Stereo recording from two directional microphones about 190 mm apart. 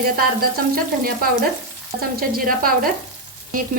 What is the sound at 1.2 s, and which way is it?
A woman's voice, 50° right (ahead or behind).